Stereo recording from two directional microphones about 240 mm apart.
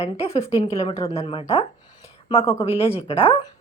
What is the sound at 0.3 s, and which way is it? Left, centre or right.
A woman's voice, left.